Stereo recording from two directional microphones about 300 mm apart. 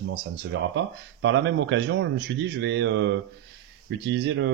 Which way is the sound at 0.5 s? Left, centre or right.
Right.